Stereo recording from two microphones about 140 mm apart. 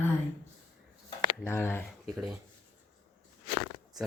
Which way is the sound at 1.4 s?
15° left (ahead or behind).